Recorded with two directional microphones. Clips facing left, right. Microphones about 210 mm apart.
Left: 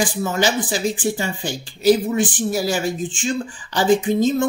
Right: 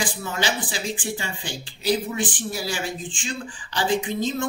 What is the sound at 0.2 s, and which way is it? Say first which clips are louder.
Speech: left 7 dB; 45° left (ahead or behind).